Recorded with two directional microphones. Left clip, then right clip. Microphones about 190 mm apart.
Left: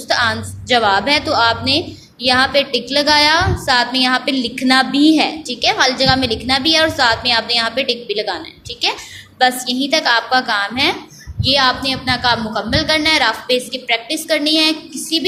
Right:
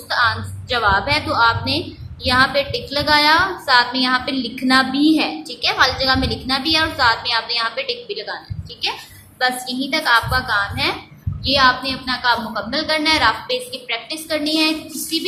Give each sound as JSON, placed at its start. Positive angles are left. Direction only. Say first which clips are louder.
{"t": 0.1, "sound": "a woman's voice", "louder": "left 2 dB", "side_deg": 20}
{"t": 9.4, "sound": "a woman's voice", "louder": "left 5 dB", "side_deg": 25}